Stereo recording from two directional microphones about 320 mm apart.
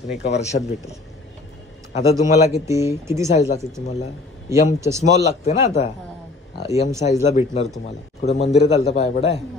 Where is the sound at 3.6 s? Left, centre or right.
Centre.